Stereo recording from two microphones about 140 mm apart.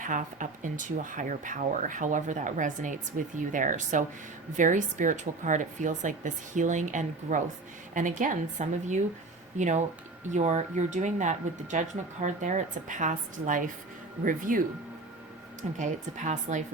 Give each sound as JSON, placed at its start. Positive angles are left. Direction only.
{"t": 0.0, "sound": "a woman's voice", "side_deg": -65}
{"t": 15.8, "sound": "a woman's voice", "side_deg": -60}